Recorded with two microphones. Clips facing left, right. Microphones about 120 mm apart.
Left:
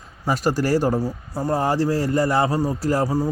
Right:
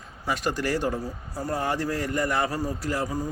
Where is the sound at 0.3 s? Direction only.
40° left (ahead or behind).